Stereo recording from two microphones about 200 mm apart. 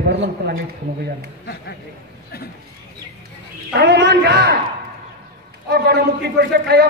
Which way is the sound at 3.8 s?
60° right (ahead or behind).